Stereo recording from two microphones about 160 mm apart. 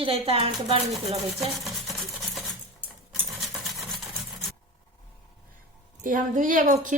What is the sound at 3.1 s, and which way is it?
Patter, centre (ahead or behind).